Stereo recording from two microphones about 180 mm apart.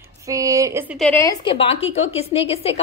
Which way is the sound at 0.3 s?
20° right (ahead or behind).